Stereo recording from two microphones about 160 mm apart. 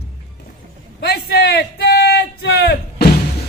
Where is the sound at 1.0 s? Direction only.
75° left (ahead or behind).